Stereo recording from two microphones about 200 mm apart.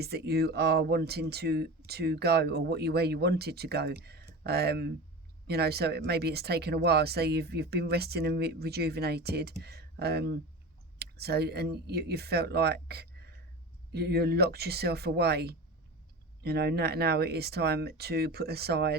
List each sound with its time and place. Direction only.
0.0 s speech: 50° right (ahead or behind)